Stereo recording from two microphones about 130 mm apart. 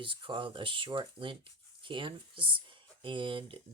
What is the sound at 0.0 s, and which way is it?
Speech, 40° right (ahead or behind).